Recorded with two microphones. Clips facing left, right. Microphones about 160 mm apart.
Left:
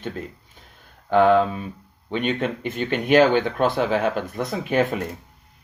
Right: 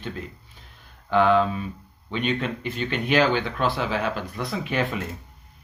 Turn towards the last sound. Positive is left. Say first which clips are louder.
# left 5 dB
turn(degrees=45)  # may be behind; listen again after turning